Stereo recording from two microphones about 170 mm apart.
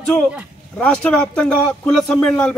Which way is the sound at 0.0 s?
5° left (ahead or behind).